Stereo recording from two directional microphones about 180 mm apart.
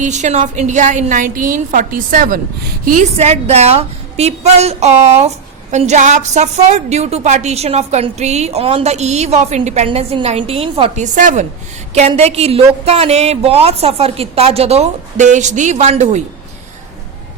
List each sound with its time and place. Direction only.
0.0 s a woman's voice: 40° right (ahead or behind)